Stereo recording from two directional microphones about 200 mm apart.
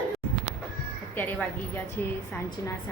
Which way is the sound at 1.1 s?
10° left (ahead or behind).